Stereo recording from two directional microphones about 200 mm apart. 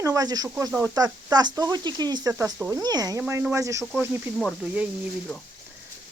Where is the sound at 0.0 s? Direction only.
15° right (ahead or behind).